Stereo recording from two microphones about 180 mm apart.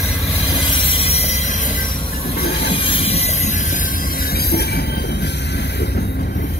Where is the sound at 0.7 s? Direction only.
30° left (ahead or behind).